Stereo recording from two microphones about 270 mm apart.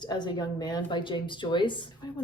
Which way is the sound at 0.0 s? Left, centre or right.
Centre.